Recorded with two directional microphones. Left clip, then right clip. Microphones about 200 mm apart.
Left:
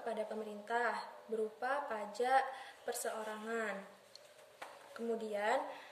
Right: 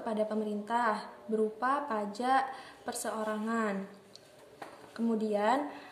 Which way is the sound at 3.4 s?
5° left (ahead or behind).